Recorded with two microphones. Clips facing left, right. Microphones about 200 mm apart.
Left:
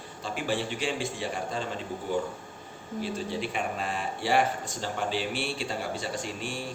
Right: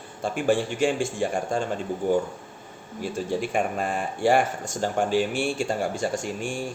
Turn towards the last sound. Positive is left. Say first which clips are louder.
# right 5 dB
turn(degrees=-50)  # may be behind; listen again after turning